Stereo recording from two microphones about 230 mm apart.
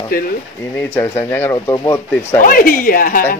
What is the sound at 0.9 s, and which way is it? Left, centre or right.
Speech, centre.